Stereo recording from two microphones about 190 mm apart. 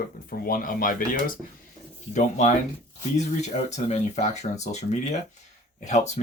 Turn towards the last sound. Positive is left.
turn(degrees=35)  # may be behind; listen again after turning